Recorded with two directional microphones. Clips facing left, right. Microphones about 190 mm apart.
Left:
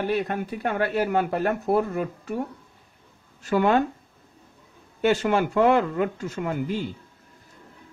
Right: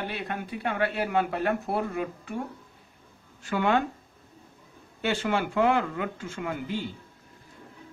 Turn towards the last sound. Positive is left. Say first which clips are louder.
# left 4 dB
turn(degrees=40)  # may be behind; listen again after turning